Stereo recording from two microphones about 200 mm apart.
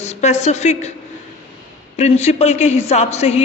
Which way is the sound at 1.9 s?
35° left (ahead or behind).